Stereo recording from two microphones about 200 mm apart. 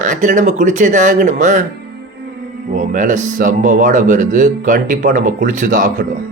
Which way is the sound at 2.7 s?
40° right (ahead or behind).